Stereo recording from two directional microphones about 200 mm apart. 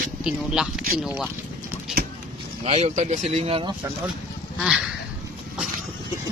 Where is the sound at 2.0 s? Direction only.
50° right (ahead or behind).